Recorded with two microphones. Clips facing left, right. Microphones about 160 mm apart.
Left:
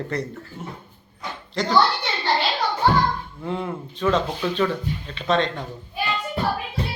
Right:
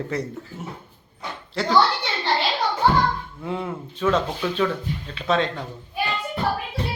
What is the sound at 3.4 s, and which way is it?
Speech, 5° right (ahead or behind).